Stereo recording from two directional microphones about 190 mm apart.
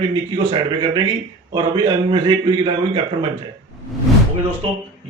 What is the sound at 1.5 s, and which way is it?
A man's voice, 20° right (ahead or behind).